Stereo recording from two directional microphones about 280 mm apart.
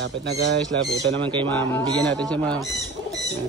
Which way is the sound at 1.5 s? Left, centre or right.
Centre.